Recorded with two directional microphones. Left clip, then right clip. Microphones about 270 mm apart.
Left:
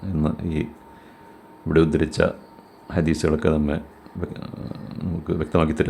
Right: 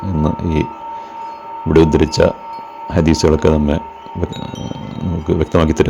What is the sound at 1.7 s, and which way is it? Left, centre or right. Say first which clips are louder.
Speech: right 8 dB; centre.